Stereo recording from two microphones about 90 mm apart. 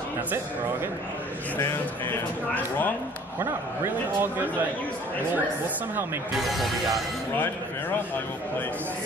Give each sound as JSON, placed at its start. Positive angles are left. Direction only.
{"t": 1.6, "sound": "speech", "side_deg": 25}
{"t": 3.3, "sound": "a man's voice", "side_deg": -25}
{"t": 6.4, "sound": "speech", "side_deg": 0}
{"t": 7.3, "sound": "speech", "side_deg": 20}